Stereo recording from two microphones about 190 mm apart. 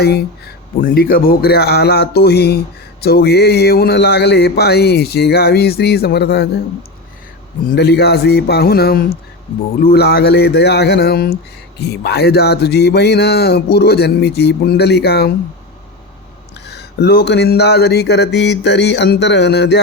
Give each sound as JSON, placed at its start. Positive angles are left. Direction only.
{"t": 0.0, "sound": "speech", "side_deg": 60}
{"t": 7.7, "sound": "speech", "side_deg": 60}
{"t": 16.6, "sound": "speech", "side_deg": 60}